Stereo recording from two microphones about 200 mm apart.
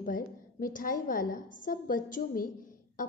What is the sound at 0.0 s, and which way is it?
A woman's voice, 45° left (ahead or behind).